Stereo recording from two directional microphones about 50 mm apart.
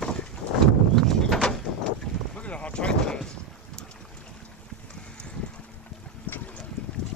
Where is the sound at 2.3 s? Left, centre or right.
Left.